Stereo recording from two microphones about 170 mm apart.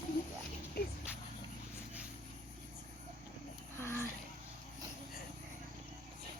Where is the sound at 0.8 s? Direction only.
65° left (ahead or behind).